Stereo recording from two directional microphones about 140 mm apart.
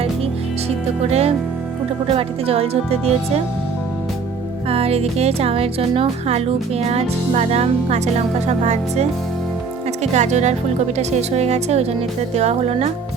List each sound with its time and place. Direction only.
1.1 s speech: 45° right (ahead or behind)
4.7 s speech: 45° right (ahead or behind)